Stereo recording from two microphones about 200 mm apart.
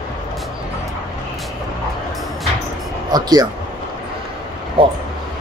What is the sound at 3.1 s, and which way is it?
Speech, 20° right (ahead or behind).